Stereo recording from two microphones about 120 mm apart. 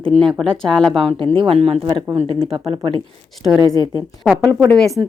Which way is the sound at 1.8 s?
40° right (ahead or behind).